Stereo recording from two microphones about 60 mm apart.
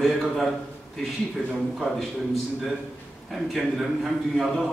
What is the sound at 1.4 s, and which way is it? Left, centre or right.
Speech, right.